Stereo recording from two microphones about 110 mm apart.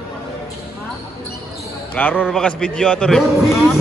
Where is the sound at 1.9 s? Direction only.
15° left (ahead or behind).